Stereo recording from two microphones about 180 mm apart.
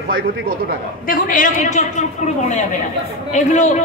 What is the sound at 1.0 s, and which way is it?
A man's voice, 50° left (ahead or behind).